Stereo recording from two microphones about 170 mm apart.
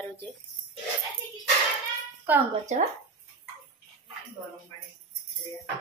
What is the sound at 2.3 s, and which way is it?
Speech, 10° right (ahead or behind).